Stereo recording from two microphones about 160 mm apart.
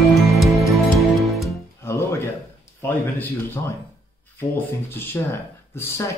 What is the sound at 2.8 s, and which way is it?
Speech, 15° left (ahead or behind).